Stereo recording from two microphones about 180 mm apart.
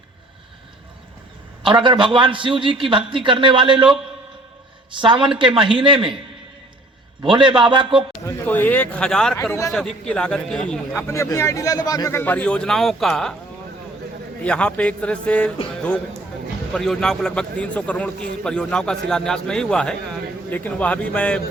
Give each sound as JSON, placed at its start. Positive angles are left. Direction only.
{"t": 1.6, "sound": "a man's voice", "side_deg": -25}
{"t": 4.9, "sound": "a man's voice", "side_deg": -25}
{"t": 7.3, "sound": "a man's voice", "side_deg": -25}
{"t": 8.4, "sound": "a man's voice", "side_deg": 10}
{"t": 9.7, "sound": "a man's voice", "side_deg": 5}
{"t": 11.1, "sound": "a man's voice", "side_deg": 15}
{"t": 14.4, "sound": "a man's voice", "side_deg": 5}
{"t": 16.7, "sound": "a man's voice", "side_deg": 5}